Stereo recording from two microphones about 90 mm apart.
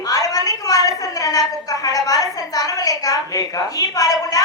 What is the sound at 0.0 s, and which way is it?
A woman's voice, 40° left (ahead or behind).